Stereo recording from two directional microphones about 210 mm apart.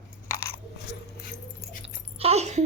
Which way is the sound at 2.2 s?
30° right (ahead or behind).